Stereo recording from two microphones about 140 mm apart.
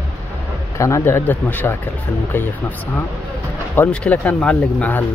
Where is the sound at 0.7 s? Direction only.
20° left (ahead or behind).